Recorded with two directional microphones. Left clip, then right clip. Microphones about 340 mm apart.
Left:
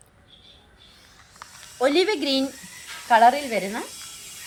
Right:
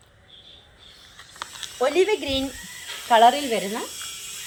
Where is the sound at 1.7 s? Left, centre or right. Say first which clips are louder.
Even; centre.